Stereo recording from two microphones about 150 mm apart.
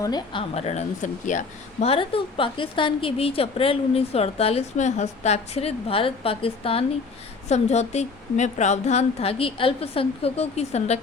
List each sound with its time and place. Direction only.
0.0 s a woman's voice: 25° left (ahead or behind)
0.5 s a woman's voice: 45° left (ahead or behind)
1.9 s a woman's voice: 35° left (ahead or behind)